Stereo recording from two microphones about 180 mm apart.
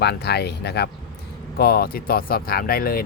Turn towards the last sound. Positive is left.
turn(degrees=55)  # may be behind; listen again after turning